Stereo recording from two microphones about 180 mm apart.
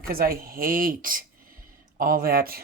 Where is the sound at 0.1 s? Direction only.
55° right (ahead or behind).